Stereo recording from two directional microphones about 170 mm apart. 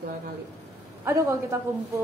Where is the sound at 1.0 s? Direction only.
15° right (ahead or behind).